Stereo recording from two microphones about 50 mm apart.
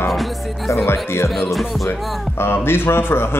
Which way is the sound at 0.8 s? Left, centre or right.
Left.